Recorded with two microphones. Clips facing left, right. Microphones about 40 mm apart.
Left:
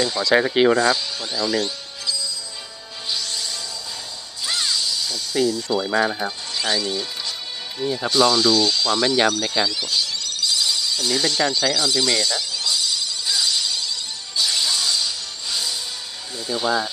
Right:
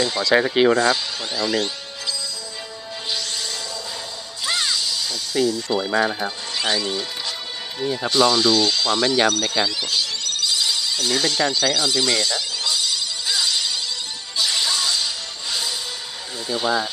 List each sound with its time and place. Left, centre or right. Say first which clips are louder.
0.0 s speech: even; centre
3.2 s music: right 1 dB; right
4.4 s speech: right 1 dB; centre
6.9 s music: right 1 dB; centre
7.8 s speech: even; centre
9.6 s a sound: even; centre
11.7 s music: even; centre
16.5 s speech: even; centre